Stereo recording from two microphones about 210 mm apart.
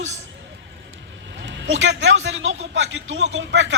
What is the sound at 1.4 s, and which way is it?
A man's voice, 60° right (ahead or behind).